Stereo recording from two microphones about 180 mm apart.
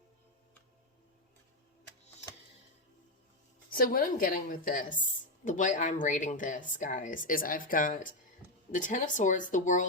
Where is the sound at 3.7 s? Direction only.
55° left (ahead or behind).